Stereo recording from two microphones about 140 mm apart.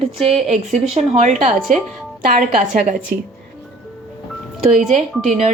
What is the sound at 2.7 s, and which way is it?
Speech, 75° right (ahead or behind).